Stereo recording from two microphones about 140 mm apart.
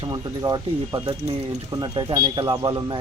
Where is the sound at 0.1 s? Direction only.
30° right (ahead or behind).